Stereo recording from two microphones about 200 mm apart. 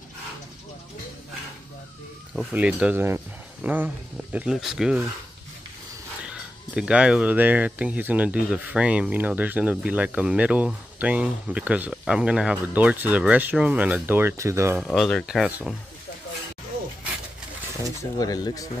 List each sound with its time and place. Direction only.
2.3 s speech: 5° right (ahead or behind)
6.2 s speech: 5° right (ahead or behind)
14.8 s speech: centre (ahead or behind)
18.2 s speech: 20° left (ahead or behind)